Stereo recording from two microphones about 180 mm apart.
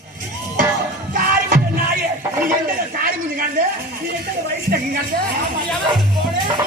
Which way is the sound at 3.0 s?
50° right (ahead or behind).